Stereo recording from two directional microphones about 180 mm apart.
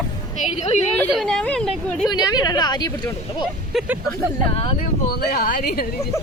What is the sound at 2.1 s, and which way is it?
Speech, 20° left (ahead or behind).